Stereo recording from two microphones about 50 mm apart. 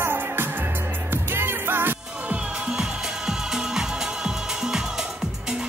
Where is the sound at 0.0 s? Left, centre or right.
Right.